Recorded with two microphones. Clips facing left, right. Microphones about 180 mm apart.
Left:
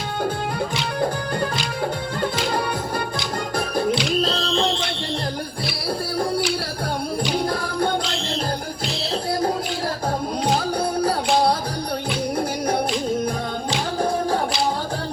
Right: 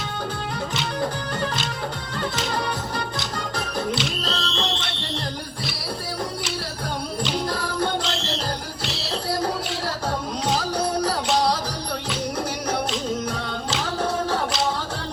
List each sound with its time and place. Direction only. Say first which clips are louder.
4.2 s music: left 6 dB; 35° left (ahead or behind)
7.3 s music: left 2 dB; 50° left (ahead or behind)
10.4 s music: left 2 dB; 55° left (ahead or behind)